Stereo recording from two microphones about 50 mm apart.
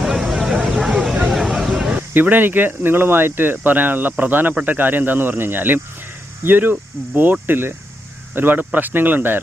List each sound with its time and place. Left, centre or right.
0.0 s vehicle: centre
1.5 s a sound: centre
2.1 s speech: right